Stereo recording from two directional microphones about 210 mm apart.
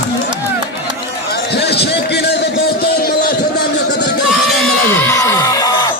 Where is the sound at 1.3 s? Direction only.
50° left (ahead or behind).